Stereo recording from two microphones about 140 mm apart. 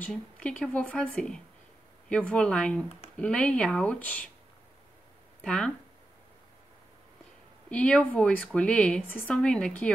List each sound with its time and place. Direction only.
0.0 s a woman's voice: 10° left (ahead or behind)
5.4 s speech: 5° left (ahead or behind)
7.7 s a woman's voice: 10° left (ahead or behind)